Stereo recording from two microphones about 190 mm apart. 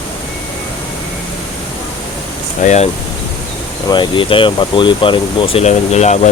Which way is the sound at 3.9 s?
25° left (ahead or behind).